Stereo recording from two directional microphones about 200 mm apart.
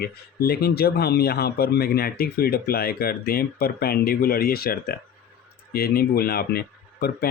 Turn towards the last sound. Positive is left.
turn(degrees=50)  # may be behind; listen again after turning